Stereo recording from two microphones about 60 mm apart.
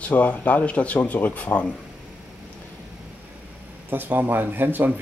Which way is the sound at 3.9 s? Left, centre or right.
Right.